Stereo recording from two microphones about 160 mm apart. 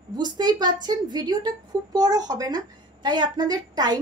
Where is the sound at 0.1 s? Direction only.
25° right (ahead or behind).